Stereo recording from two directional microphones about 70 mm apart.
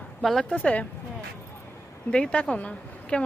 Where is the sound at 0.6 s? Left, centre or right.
Centre.